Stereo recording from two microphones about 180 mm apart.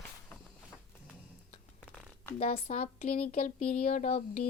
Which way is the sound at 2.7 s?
40° left (ahead or behind).